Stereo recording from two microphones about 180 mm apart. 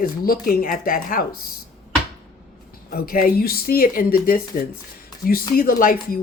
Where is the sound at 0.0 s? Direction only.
50° left (ahead or behind).